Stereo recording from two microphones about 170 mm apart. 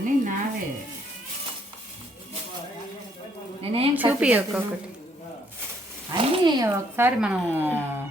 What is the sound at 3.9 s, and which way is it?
Speech, 10° right (ahead or behind).